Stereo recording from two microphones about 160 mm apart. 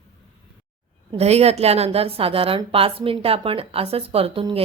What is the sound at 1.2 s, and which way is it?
A woman's voice, 40° right (ahead or behind).